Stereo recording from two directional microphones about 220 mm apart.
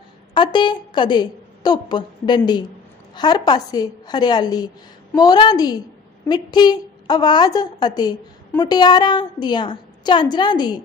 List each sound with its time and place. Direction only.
0.3 s a woman's voice: 20° left (ahead or behind)